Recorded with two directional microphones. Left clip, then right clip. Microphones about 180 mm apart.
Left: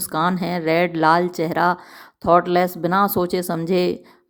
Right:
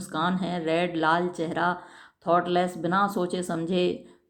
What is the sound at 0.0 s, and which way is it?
Speech, 40° left (ahead or behind).